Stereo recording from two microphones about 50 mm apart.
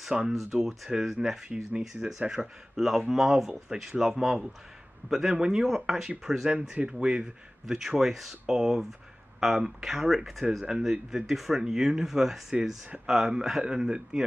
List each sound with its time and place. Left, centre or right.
0.3 s speech: centre
5.3 s speech: centre
6.5 s speech: right
7.6 s speech: centre